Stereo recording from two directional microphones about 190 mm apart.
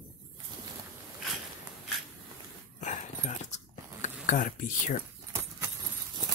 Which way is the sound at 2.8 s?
40° left (ahead or behind).